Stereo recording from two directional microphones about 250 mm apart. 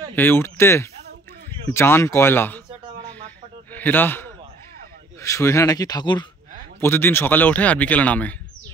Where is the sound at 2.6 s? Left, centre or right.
Centre.